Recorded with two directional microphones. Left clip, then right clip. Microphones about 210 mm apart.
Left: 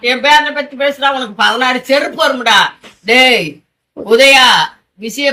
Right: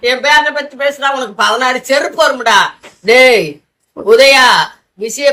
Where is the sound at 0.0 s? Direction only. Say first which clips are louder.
Even; 20° right (ahead or behind).